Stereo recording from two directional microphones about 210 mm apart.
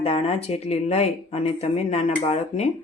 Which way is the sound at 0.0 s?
25° left (ahead or behind).